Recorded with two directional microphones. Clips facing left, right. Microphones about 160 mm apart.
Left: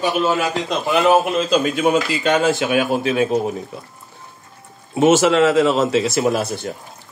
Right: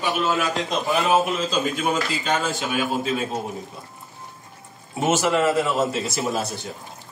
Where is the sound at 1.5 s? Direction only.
75° left (ahead or behind).